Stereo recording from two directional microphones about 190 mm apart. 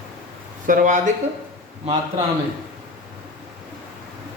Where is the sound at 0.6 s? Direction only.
45° right (ahead or behind).